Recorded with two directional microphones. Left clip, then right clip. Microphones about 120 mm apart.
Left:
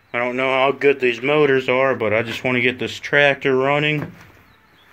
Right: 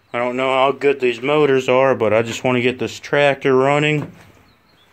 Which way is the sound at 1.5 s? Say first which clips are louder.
Right 2 dB; 50° right (ahead or behind).